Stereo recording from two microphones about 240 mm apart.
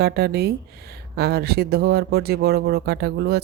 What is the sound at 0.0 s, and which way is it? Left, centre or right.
Speech, right.